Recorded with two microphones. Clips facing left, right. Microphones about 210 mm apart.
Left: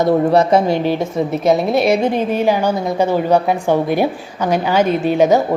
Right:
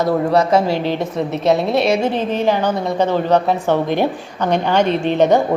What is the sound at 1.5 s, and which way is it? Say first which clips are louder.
Speech: left 1 dB; centre (ahead or behind).